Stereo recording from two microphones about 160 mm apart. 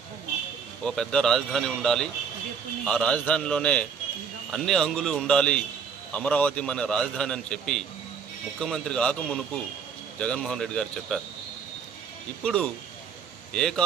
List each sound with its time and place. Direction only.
0.8 s a man's voice: 5° left (ahead or behind)
12.4 s a man's voice: 5° left (ahead or behind)